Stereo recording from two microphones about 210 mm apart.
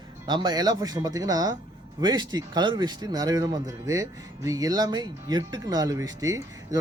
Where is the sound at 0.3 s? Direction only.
20° right (ahead or behind).